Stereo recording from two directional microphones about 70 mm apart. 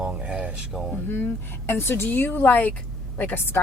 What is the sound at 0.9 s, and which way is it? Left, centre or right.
A woman's voice, left.